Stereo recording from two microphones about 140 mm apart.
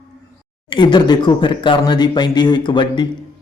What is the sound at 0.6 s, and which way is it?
Speech, 35° left (ahead or behind).